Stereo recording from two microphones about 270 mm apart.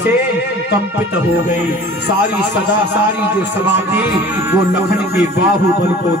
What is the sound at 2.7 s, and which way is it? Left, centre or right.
Speech, left.